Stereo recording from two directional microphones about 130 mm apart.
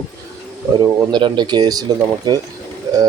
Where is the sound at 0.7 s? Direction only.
35° right (ahead or behind).